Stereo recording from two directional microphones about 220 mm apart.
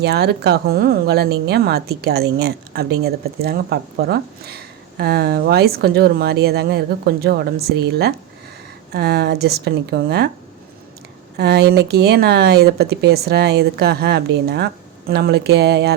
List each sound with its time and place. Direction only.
0.0 s speech: 50° right (ahead or behind)
11.3 s speech: 50° right (ahead or behind)